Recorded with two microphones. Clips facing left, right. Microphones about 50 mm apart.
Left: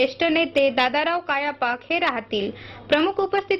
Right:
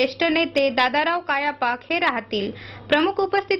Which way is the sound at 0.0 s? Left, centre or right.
Centre.